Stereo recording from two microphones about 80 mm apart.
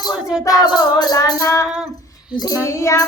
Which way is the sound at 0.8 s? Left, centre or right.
Left.